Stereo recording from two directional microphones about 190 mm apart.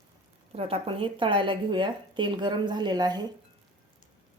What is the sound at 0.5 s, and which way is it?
A woman's voice, 30° right (ahead or behind).